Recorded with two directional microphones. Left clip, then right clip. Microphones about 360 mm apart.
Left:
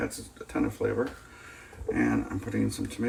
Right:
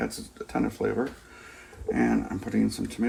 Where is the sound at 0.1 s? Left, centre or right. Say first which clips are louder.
Right 3 dB; centre.